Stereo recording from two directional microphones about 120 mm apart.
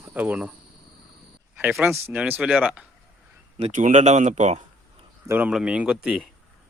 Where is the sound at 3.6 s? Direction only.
75° right (ahead or behind).